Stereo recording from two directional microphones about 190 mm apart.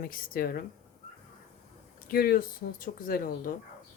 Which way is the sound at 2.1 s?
50° left (ahead or behind).